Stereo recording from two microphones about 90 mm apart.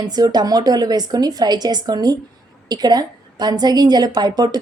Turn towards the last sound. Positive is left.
turn(degrees=-50)  # may be behind; listen again after turning